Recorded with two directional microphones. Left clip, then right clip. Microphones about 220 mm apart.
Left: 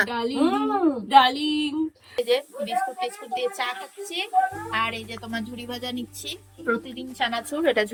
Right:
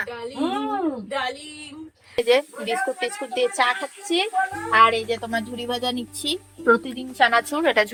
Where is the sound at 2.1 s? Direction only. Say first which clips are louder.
Right 5 dB; 20° right (ahead or behind).